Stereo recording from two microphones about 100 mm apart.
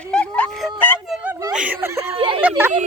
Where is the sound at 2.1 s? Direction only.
60° right (ahead or behind).